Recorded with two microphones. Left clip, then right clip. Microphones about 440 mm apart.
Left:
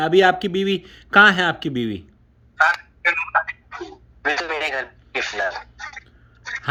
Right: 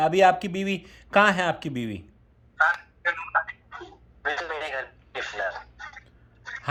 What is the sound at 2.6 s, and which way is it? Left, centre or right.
Telephone, left.